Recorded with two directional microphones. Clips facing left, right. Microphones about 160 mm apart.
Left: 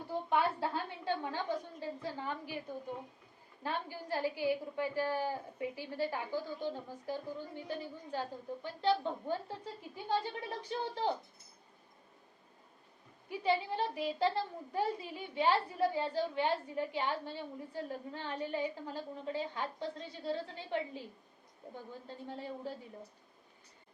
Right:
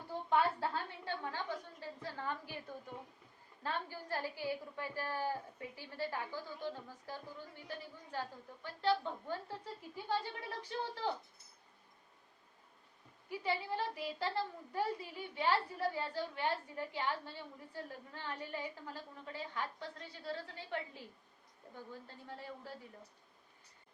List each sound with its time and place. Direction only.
0.3 s a woman's voice: 15° left (ahead or behind)
3.6 s a woman's voice: 15° left (ahead or behind)
13.3 s a woman's voice: 20° left (ahead or behind)
22.0 s a woman's voice: 20° left (ahead or behind)